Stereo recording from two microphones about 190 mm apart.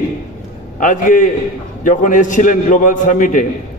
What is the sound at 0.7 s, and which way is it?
A man's voice, 45° left (ahead or behind).